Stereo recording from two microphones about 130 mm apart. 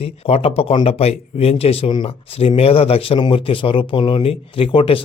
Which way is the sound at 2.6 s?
50° left (ahead or behind).